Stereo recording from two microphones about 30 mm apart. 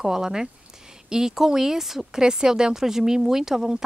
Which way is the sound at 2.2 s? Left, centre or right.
Right.